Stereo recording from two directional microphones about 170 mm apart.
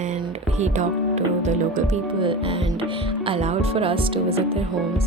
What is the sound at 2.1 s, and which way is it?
Speech, 30° right (ahead or behind).